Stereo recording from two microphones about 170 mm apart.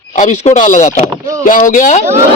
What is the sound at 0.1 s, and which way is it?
Speech, 45° left (ahead or behind).